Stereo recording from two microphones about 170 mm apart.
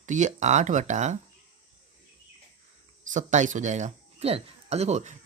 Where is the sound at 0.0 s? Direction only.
45° right (ahead or behind).